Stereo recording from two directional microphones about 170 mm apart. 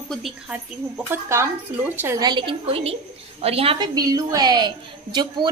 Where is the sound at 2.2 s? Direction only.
30° right (ahead or behind).